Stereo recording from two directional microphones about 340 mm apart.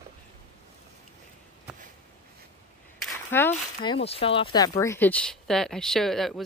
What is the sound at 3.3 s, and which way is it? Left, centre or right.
Speech, centre.